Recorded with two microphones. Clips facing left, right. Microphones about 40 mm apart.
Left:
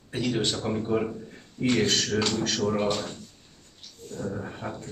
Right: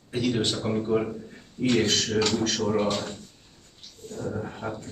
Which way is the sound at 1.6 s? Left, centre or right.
Centre.